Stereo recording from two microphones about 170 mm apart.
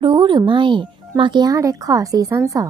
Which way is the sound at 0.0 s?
25° right (ahead or behind).